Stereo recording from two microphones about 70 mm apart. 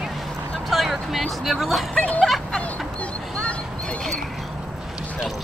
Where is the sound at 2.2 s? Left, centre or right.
Centre.